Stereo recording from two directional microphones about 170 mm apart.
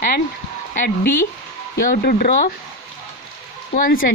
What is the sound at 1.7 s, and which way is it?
Speech, 55° left (ahead or behind).